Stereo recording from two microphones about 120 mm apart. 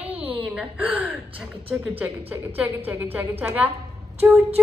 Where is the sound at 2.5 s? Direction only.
20° right (ahead or behind).